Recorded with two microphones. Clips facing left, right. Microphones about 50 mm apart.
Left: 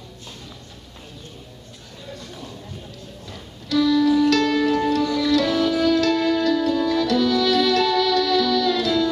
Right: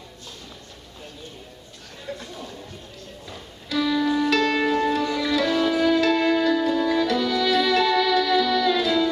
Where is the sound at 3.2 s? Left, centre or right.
Centre.